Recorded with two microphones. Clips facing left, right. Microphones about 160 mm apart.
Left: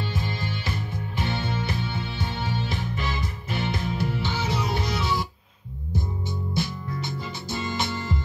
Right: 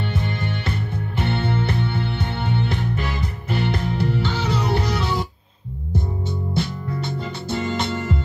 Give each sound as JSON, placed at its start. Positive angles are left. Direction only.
{"t": 0.0, "sound": "music", "side_deg": -60}
{"t": 6.5, "sound": "music", "side_deg": -65}